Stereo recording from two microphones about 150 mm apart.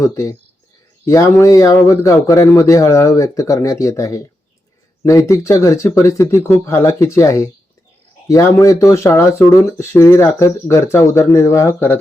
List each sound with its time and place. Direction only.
0.0 s speech: 20° left (ahead or behind)